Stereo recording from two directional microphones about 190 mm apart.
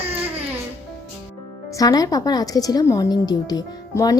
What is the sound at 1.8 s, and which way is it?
A woman's voice, 20° left (ahead or behind).